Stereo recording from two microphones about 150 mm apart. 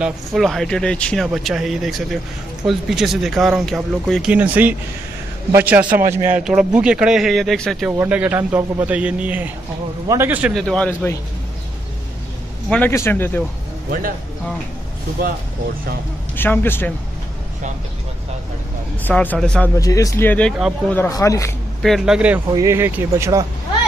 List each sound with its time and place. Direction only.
0.0 s a man's voice: centre (ahead or behind)
8.0 s a man's voice: 10° right (ahead or behind)
10.5 s speech: 5° left (ahead or behind)
10.9 s a man's voice: 15° left (ahead or behind)
12.6 s a man's voice: 10° left (ahead or behind)
13.8 s speech: 70° right (ahead or behind)
16.3 s a man's voice: 15° left (ahead or behind)
19.0 s a man's voice: 10° left (ahead or behind)
19.8 s speech: 25° left (ahead or behind)
21.1 s speech: 20° left (ahead or behind)
21.8 s speech: centre (ahead or behind)
22.5 s speech: 20° right (ahead or behind)